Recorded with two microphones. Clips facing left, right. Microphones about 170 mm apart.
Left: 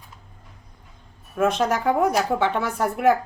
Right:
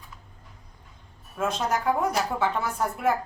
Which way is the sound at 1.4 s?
75° left (ahead or behind).